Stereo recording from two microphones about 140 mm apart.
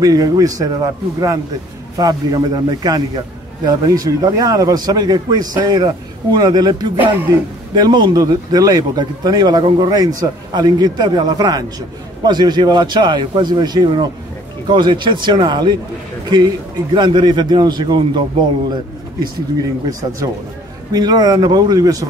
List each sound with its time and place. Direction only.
0.0 s a man's voice: 25° right (ahead or behind)
19.9 s speech: 25° right (ahead or behind)